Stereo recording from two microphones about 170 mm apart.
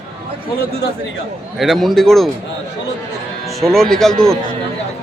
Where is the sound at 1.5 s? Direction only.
Centre (ahead or behind).